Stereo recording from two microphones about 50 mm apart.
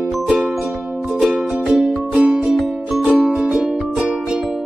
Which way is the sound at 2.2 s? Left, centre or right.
Right.